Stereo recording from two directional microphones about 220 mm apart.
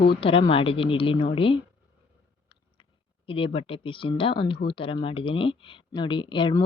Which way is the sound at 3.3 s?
25° left (ahead or behind).